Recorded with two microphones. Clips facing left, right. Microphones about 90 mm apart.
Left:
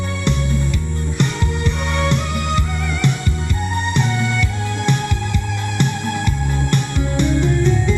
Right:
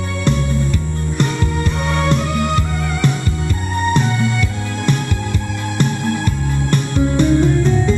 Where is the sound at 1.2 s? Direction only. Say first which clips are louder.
Right 2 dB; 40° right (ahead or behind).